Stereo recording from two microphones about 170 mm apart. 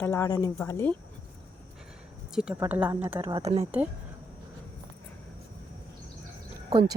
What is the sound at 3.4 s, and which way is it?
Speech, 35° right (ahead or behind).